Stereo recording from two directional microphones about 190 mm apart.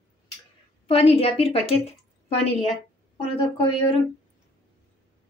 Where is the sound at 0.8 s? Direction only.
30° left (ahead or behind).